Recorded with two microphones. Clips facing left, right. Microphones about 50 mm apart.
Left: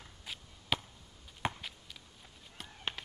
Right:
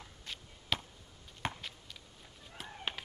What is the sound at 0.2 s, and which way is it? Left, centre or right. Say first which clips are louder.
Chop: left 1 dB; centre.